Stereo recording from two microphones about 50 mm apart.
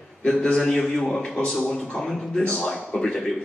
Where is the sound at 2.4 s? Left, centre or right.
Left.